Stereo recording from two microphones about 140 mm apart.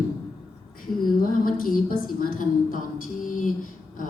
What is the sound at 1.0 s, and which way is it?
A woman's voice, 90° left.